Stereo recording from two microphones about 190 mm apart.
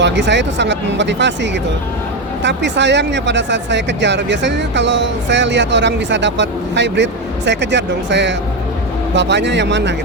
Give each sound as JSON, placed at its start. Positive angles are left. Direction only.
{"t": 0.0, "sound": "speech", "side_deg": -70}